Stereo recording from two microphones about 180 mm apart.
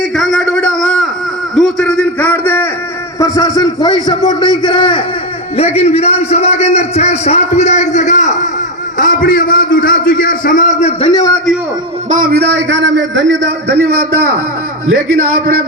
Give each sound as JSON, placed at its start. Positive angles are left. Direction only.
{"t": 0.2, "sound": "a sound", "side_deg": 0}
{"t": 3.2, "sound": "a man's voice", "side_deg": 20}
{"t": 12.0, "sound": "a man's voice", "side_deg": -50}